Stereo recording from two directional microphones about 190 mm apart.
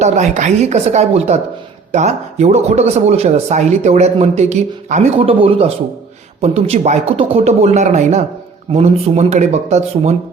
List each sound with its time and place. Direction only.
0.0 s speech: 40° right (ahead or behind)